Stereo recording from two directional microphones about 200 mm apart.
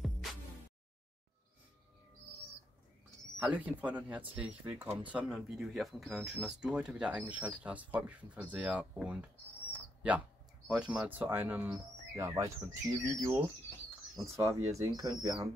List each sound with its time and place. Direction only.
0.0 s music: centre (ahead or behind)
3.3 s speech: 5° right (ahead or behind)
9.7 s bird: 5° right (ahead or behind)
10.7 s speech: 5° right (ahead or behind)